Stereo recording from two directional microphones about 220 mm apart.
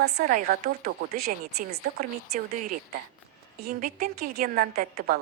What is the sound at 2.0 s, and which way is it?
Speech, 35° right (ahead or behind).